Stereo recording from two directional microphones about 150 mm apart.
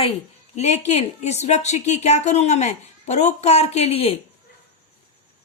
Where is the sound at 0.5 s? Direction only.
45° left (ahead or behind).